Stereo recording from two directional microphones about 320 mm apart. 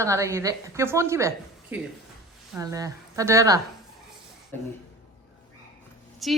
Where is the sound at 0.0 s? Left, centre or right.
Centre.